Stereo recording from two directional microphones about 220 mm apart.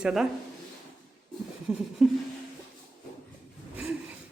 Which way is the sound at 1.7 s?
5° right (ahead or behind).